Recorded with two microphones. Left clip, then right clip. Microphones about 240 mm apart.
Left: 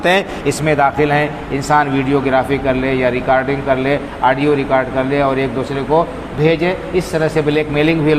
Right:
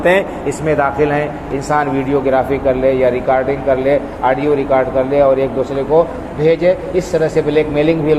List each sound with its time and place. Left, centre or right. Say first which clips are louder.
0.0 s speech: right 1 dB; left